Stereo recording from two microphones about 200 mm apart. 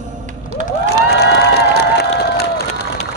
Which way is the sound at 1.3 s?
55° left (ahead or behind).